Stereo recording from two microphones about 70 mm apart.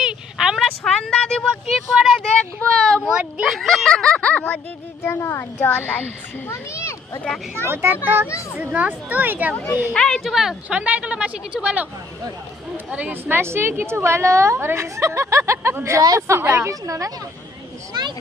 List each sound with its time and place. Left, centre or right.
0.0 s speech: centre
2.4 s child singing: centre
3.0 s speech: centre
3.4 s speech: centre
3.8 s speech: centre
5.0 s a child's voice: left
6.5 s a child's voice: left
7.6 s a woman's voice: right
8.3 s a child's voice: left
8.5 s a woman's voice: right
9.9 s speech: centre
10.2 s speech: centre
10.7 s a woman's voice: right